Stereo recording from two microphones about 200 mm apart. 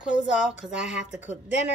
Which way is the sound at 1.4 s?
35° left (ahead or behind).